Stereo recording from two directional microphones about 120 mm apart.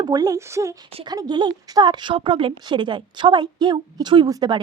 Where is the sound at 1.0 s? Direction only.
35° right (ahead or behind).